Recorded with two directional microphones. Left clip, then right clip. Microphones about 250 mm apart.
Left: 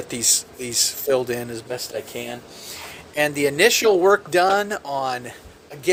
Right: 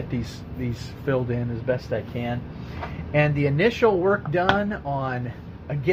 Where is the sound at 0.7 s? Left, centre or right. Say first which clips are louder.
Left 7 dB; left.